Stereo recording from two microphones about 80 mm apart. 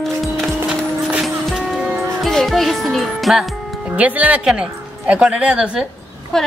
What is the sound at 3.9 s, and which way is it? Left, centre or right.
A woman's voice, centre.